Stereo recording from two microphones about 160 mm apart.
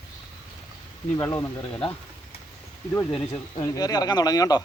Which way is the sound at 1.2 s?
15° left (ahead or behind).